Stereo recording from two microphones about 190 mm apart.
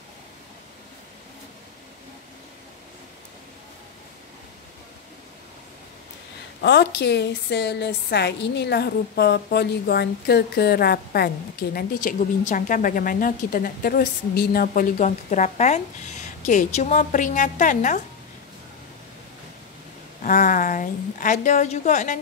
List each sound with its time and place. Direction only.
6.6 s a woman's voice: 60° left (ahead or behind); by 18.0 s 40° left (ahead or behind)
20.2 s a woman's voice: 45° left (ahead or behind)